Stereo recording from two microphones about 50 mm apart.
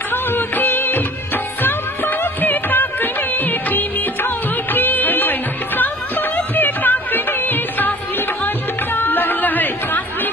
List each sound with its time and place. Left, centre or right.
0.1 s music: left
6.3 s music: left
8.9 s chatter: left